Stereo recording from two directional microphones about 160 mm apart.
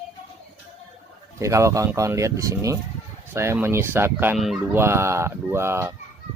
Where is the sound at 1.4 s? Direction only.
20° right (ahead or behind).